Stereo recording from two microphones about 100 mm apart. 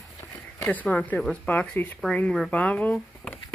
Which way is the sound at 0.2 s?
40° left (ahead or behind).